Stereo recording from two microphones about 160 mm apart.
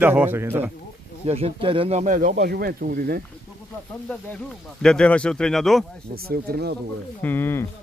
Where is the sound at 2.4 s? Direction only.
75° right (ahead or behind).